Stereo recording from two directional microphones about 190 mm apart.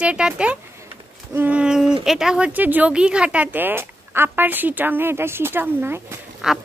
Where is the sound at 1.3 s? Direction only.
5° right (ahead or behind).